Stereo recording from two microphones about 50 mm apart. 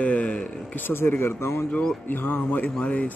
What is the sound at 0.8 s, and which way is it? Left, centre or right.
Speech, left.